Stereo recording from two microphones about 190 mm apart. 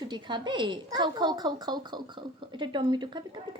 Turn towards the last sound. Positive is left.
turn(degrees=-25)  # may be behind; listen again after turning